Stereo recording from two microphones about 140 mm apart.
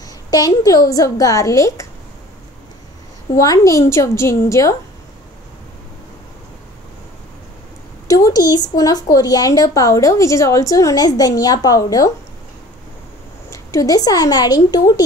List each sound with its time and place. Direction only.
0.3 s speech: 25° left (ahead or behind)
3.3 s speech: 25° left (ahead or behind)
8.1 s speech: 25° left (ahead or behind)
13.5 s speech: 25° left (ahead or behind)